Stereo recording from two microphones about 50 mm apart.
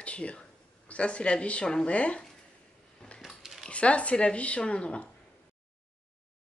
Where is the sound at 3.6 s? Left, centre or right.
Left.